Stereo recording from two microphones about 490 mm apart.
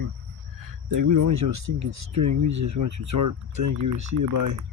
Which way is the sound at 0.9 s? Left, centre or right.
Right.